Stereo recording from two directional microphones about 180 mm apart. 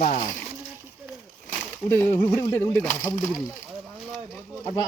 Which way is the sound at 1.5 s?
10° left (ahead or behind).